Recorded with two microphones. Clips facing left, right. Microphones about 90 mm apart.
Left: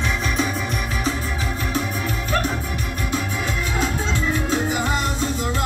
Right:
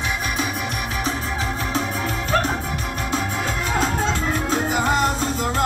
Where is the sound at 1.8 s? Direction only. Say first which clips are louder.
Right 1 dB; 35° right (ahead or behind).